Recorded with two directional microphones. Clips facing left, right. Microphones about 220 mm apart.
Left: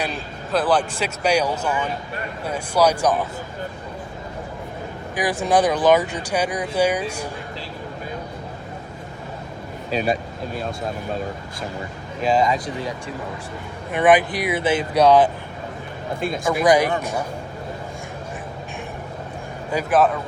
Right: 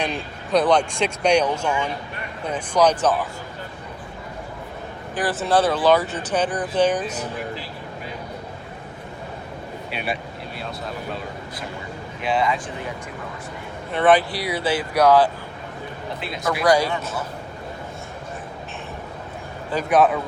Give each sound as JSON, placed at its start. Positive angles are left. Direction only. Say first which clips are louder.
{"t": 0.5, "sound": "a man's voice", "louder": "right 2 dB", "side_deg": 5}
{"t": 5.1, "sound": "speech", "louder": "left 1 dB", "side_deg": 15}
{"t": 9.9, "sound": "speech", "louder": "left 7 dB", "side_deg": 40}
{"t": 12.2, "sound": "speech", "louder": "left 3 dB", "side_deg": 40}
{"t": 13.9, "sound": "speech", "louder": "left 1 dB", "side_deg": 15}
{"t": 16.6, "sound": "speech", "louder": "left 2 dB", "side_deg": 20}
{"t": 19.7, "sound": "a man's voice", "louder": "even", "side_deg": 0}